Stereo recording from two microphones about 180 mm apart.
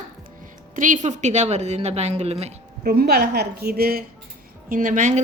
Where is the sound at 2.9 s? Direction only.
60° right (ahead or behind).